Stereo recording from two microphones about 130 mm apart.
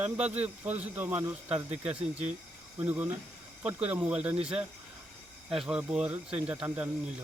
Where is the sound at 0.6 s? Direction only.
15° right (ahead or behind).